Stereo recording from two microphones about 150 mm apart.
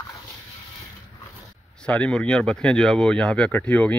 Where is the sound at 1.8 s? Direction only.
10° left (ahead or behind).